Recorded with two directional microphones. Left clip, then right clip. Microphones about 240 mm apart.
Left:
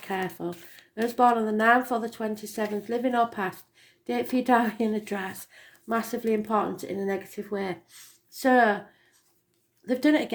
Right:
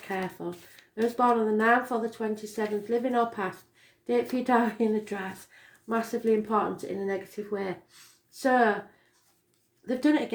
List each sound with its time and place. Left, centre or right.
0.1 s speech: left
9.8 s speech: left